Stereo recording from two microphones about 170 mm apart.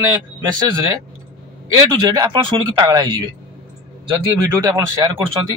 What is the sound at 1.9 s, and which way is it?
Speech, 25° right (ahead or behind).